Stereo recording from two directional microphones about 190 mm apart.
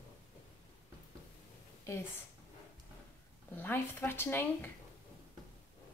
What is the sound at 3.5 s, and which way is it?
Speech, 10° left (ahead or behind).